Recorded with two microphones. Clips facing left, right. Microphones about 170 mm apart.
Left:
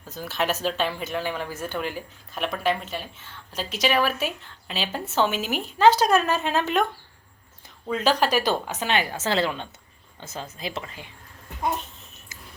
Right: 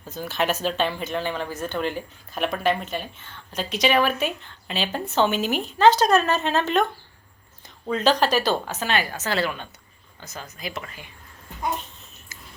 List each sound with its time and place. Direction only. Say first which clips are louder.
0.1 s speech: right 2 dB; centre (ahead or behind)
7.9 s speech: right 2 dB; 5° left (ahead or behind); by 11.0 s 25° left (ahead or behind)
12.3 s a sound: even; 15° left (ahead or behind)